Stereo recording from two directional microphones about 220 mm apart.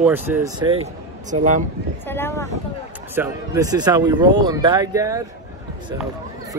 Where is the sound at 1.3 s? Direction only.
35° right (ahead or behind).